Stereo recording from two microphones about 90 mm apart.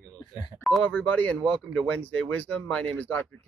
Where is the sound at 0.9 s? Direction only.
20° left (ahead or behind).